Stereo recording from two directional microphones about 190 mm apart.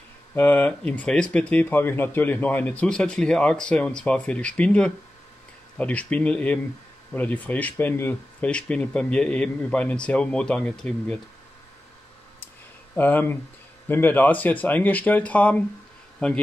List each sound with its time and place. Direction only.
0.3 s speech: 10° left (ahead or behind)
12.9 s speech: 10° left (ahead or behind)